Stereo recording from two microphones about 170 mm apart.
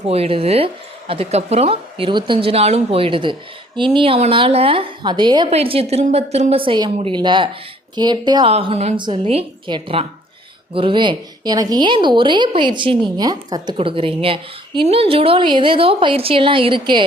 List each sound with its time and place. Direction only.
0.1 s a woman's voice: 35° right (ahead or behind)
8.5 s a woman's voice: 40° right (ahead or behind)